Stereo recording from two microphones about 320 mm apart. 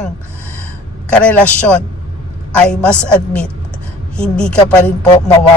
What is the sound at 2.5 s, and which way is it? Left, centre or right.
Speech, centre.